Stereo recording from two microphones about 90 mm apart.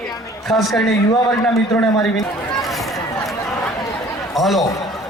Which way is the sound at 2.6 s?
Centre (ahead or behind).